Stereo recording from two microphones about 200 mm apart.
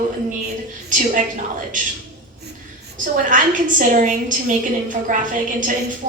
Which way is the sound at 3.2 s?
40° right (ahead or behind).